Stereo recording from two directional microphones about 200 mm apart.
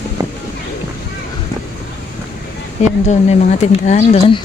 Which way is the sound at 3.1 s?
35° left (ahead or behind).